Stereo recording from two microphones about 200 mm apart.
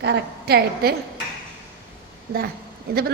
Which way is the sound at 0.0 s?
55° right (ahead or behind).